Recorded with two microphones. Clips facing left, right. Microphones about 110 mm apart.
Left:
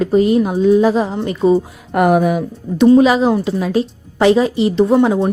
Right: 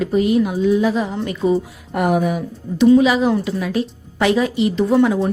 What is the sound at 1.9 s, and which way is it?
Speech, 65° left (ahead or behind).